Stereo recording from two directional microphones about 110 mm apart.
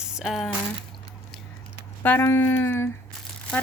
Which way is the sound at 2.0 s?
20° left (ahead or behind).